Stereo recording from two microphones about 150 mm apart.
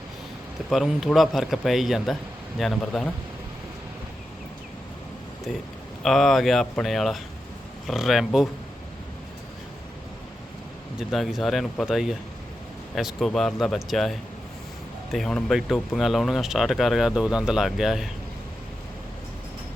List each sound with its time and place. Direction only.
0.7 s speech: centre (ahead or behind)
5.5 s speech: 5° left (ahead or behind)
11.1 s speech: centre (ahead or behind)